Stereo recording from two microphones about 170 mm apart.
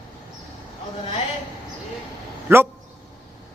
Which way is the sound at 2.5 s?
15° right (ahead or behind).